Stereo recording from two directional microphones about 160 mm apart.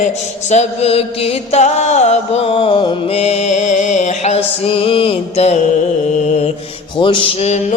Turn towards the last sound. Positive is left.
turn(degrees=40)  # may be behind; listen again after turning